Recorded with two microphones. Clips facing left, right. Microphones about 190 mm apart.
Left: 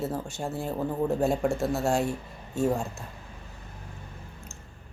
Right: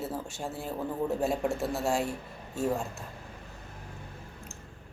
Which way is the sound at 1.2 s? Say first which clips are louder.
Left 4 dB; 5° right (ahead or behind).